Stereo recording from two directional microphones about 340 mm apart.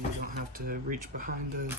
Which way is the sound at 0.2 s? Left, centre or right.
Right.